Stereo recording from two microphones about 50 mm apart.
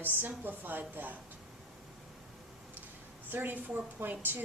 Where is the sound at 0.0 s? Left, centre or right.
Right.